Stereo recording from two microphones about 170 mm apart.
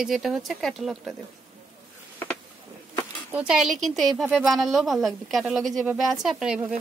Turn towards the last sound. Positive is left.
turn(degrees=-5)  # may be behind; listen again after turning